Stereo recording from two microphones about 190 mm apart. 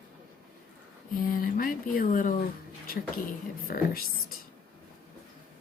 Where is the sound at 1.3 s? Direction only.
50° left (ahead or behind).